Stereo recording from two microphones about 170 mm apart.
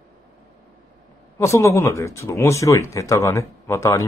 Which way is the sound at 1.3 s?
15° left (ahead or behind).